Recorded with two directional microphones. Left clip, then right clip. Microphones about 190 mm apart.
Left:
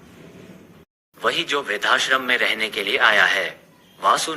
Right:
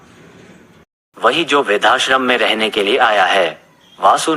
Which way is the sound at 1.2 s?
15° left (ahead or behind).